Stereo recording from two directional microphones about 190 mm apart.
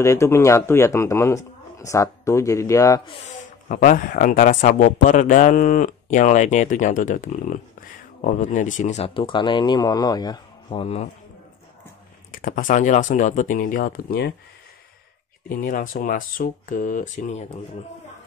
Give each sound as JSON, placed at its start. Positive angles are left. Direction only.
{"t": 0.0, "sound": "speech", "side_deg": 15}
{"t": 3.6, "sound": "speech", "side_deg": 45}
{"t": 12.3, "sound": "speech", "side_deg": 45}
{"t": 15.4, "sound": "speech", "side_deg": 45}